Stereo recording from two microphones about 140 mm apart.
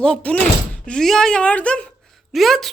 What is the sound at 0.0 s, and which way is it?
Speech, 10° left (ahead or behind).